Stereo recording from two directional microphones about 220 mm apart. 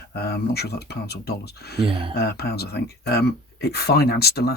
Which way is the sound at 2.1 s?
45° left (ahead or behind).